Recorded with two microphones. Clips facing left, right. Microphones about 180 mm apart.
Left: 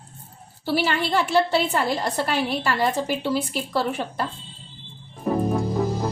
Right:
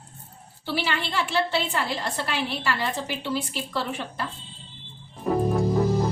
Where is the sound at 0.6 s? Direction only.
45° left (ahead or behind).